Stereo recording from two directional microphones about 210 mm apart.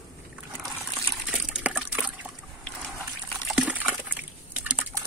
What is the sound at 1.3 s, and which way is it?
Liquid, 5° right (ahead or behind).